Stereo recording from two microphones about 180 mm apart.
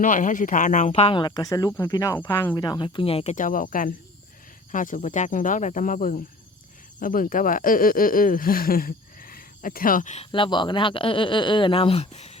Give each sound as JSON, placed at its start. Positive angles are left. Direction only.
{"t": 0.0, "sound": "speech", "side_deg": 45}
{"t": 3.3, "sound": "speech", "side_deg": 50}
{"t": 10.3, "sound": "speech", "side_deg": 25}